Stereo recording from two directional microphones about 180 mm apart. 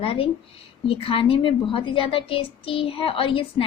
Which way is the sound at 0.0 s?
30° left (ahead or behind).